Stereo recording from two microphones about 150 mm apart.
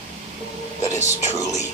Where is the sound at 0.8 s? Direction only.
20° left (ahead or behind).